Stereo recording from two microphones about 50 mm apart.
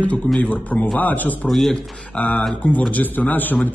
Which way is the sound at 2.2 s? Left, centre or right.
Left.